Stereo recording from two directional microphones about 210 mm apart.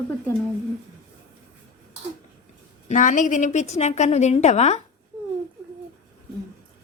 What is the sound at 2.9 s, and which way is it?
A woman's voice, 40° left (ahead or behind).